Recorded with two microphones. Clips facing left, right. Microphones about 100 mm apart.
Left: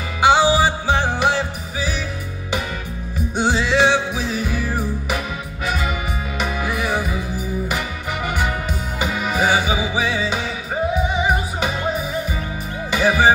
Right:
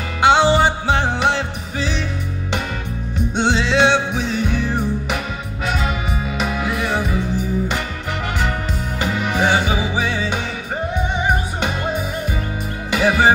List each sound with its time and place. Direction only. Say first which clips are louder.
0.2 s music: right 1 dB; 5° left (ahead or behind)
3.3 s music: right 1 dB; 5° left (ahead or behind)
9.0 s music: right 1 dB; 10° left (ahead or behind)